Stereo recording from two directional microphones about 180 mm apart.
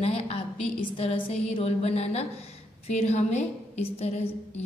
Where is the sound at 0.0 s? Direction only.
35° left (ahead or behind).